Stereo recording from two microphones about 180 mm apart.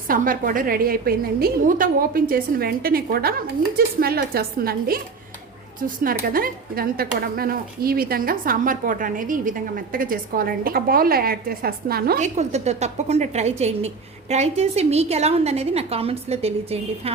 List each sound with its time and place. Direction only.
0.1 s a woman's voice: 50° right (ahead or behind)
12.2 s a woman's voice: 40° right (ahead or behind)